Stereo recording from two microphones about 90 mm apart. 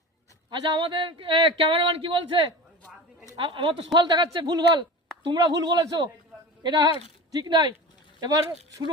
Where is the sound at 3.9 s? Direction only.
55° right (ahead or behind).